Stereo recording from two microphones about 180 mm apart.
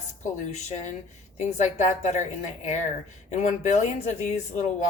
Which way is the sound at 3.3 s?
40° left (ahead or behind).